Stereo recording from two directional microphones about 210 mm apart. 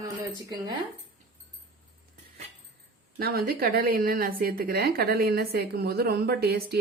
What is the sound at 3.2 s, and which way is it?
A woman's voice, 45° right (ahead or behind).